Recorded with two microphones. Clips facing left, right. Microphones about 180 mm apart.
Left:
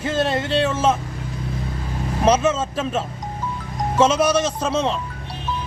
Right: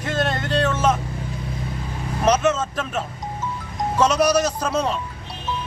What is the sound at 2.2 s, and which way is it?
Speech, 30° left (ahead or behind).